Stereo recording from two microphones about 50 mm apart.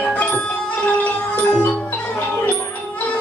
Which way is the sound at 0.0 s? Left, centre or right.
Left.